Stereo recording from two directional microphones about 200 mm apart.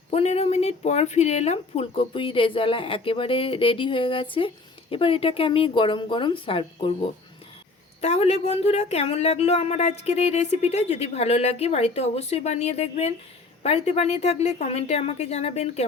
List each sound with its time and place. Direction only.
0.1 s speech: 30° left (ahead or behind)
8.0 s speech: 30° left (ahead or behind)